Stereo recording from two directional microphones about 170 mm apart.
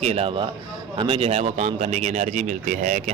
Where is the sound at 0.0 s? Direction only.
40° right (ahead or behind).